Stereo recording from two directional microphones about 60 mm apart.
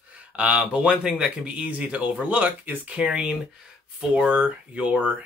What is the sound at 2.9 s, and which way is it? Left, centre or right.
Speech, centre.